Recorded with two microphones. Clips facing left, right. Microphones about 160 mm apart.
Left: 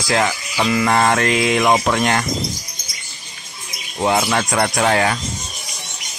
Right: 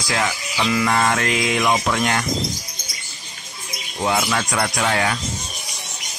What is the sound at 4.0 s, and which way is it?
Speech, 40° left (ahead or behind).